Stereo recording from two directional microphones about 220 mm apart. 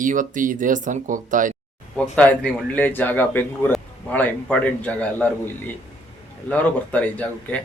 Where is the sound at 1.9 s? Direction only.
5° left (ahead or behind).